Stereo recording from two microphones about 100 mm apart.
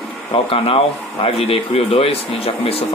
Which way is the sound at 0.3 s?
70° left (ahead or behind).